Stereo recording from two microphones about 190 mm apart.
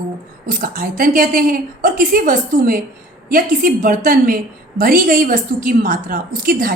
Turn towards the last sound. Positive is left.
turn(degrees=-50)  # may be behind; listen again after turning